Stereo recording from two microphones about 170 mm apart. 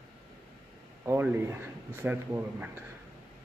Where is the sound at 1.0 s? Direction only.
15° right (ahead or behind).